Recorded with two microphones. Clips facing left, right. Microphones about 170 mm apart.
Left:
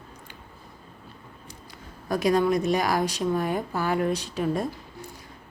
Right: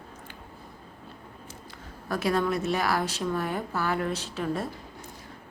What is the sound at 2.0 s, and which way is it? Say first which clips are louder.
A woman's voice: left 4 dB; 15° left (ahead or behind).